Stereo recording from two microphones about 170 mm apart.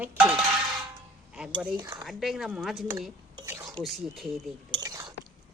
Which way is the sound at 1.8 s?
20° right (ahead or behind).